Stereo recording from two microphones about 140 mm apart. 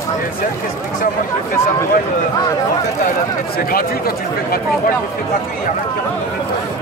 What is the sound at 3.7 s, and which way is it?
Chatter, 90° left.